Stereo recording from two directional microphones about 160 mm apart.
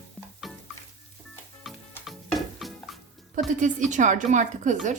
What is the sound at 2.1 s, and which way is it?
Stir, centre (ahead or behind).